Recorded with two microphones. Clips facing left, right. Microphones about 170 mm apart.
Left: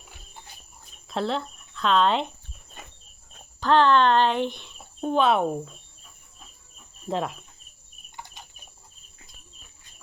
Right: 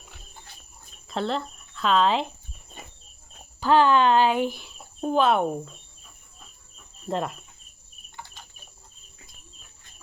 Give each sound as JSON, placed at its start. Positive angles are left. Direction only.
{"t": 1.0, "sound": "speech", "side_deg": 0}
{"t": 3.3, "sound": "speech", "side_deg": -10}
{"t": 7.1, "sound": "cricket", "side_deg": 0}
{"t": 8.1, "sound": "a sound", "side_deg": 20}